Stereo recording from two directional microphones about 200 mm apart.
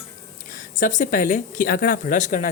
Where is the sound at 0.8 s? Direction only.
40° left (ahead or behind).